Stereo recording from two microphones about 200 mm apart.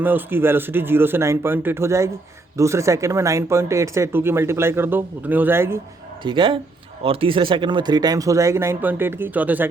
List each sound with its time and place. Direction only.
0.0 s speech: 10° right (ahead or behind)
6.2 s speech: 25° right (ahead or behind); by 9.6 s 10° right (ahead or behind)